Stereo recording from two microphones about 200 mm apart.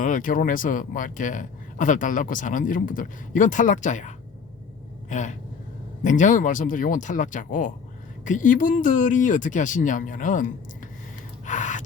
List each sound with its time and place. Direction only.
0.0 s speech: 40° left (ahead or behind)
11.4 s gasp: 40° left (ahead or behind)